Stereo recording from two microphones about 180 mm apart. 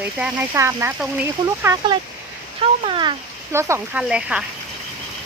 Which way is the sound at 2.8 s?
25° right (ahead or behind).